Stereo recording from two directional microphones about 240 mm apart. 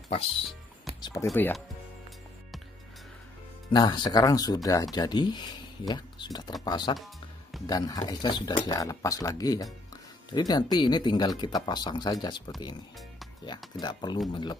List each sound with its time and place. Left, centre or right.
0.1 s speech: left
1.2 s speech: centre
3.7 s speech: centre
13.7 s speech: centre